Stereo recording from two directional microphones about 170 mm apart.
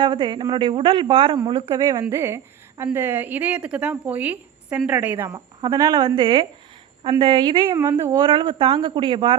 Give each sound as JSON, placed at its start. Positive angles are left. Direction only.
{"t": 0.0, "sound": "a woman's voice", "side_deg": -30}
{"t": 1.7, "sound": "a woman's voice", "side_deg": -20}
{"t": 5.6, "sound": "a woman's voice", "side_deg": -25}
{"t": 7.8, "sound": "speech", "side_deg": -15}